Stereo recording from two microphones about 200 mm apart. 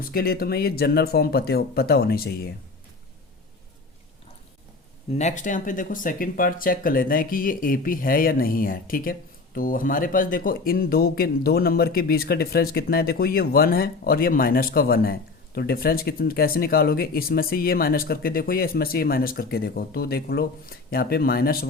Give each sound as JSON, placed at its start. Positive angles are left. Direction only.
{"t": 0.0, "sound": "speech", "side_deg": 50}
{"t": 5.1, "sound": "speech", "side_deg": 35}